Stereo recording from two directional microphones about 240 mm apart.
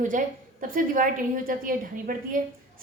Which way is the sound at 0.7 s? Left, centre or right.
Right.